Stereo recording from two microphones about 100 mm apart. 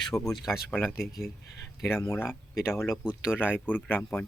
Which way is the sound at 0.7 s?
20° left (ahead or behind).